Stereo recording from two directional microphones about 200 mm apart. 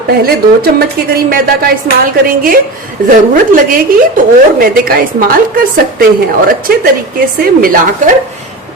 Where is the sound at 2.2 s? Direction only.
45° right (ahead or behind).